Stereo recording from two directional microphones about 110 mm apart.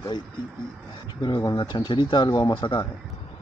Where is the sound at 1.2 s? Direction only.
40° left (ahead or behind).